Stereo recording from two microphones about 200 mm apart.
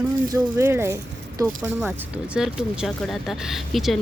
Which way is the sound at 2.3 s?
5° right (ahead or behind).